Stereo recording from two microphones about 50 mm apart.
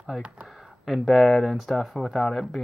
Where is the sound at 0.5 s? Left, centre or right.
Centre.